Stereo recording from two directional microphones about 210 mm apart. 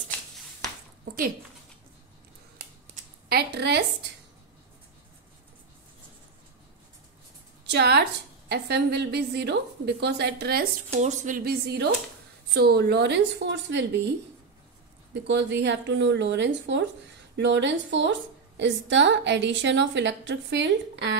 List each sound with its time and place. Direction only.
3.3 s a woman's voice: 50° right (ahead or behind)
7.6 s a woman's voice: 50° right (ahead or behind)
10.9 s a woman's voice: 35° right (ahead or behind); by 14.1 s 55° right (ahead or behind)
15.2 s a woman's voice: 55° right (ahead or behind)